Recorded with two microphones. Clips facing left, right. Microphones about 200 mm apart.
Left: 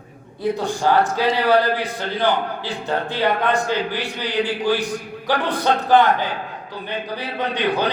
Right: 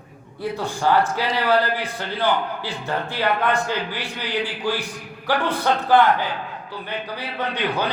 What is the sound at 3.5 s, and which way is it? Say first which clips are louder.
A man's voice: left 3 dB; 15° left (ahead or behind).